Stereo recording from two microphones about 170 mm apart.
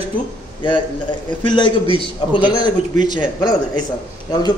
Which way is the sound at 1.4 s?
30° left (ahead or behind).